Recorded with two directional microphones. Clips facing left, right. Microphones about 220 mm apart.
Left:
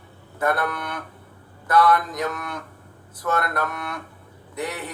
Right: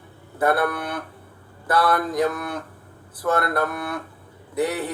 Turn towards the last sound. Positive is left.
turn(degrees=-30)  # may be behind; listen again after turning